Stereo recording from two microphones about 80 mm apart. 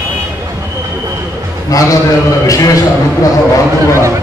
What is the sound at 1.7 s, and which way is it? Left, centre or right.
A man's voice, left.